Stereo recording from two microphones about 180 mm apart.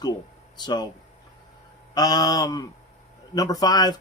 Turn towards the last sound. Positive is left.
turn(degrees=20)  # may be behind; listen again after turning